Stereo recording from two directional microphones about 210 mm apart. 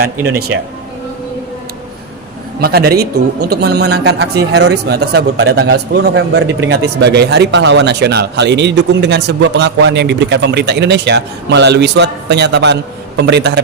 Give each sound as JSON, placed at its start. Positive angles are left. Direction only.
{"t": 0.5, "sound": "speech", "side_deg": -60}
{"t": 2.6, "sound": "speech", "side_deg": -50}